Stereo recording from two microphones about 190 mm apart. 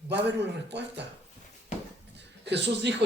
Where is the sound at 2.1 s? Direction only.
65° right (ahead or behind).